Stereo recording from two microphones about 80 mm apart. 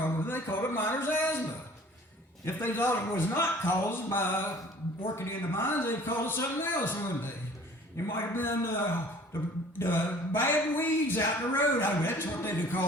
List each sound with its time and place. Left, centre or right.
0.0 s a sound: left
2.4 s speech: left
9.7 s speech: left